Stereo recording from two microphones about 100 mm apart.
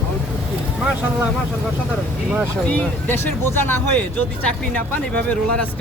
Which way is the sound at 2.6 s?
20° left (ahead or behind).